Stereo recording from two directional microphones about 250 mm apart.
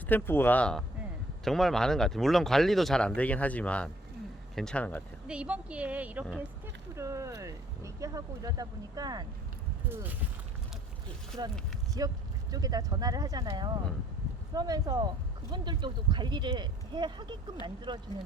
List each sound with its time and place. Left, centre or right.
0.1 s speech: centre
5.3 s speech: centre
11.9 s speech: centre